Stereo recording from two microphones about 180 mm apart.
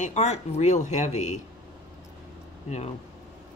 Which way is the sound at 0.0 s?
40° left (ahead or behind).